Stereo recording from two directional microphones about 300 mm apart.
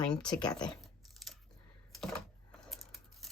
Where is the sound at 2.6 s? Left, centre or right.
Centre.